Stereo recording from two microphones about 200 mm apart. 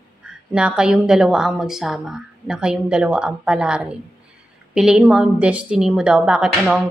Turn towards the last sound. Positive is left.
turn(degrees=-5)  # may be behind; listen again after turning